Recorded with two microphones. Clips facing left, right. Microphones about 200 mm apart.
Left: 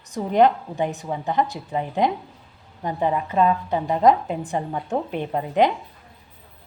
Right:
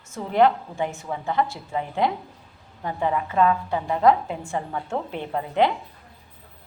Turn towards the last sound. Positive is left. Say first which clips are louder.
# left 2 dB
turn(degrees=15)  # may be behind; listen again after turning